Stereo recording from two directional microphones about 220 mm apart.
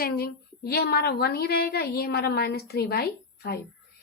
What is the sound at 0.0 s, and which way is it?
A woman's voice, 45° left (ahead or behind).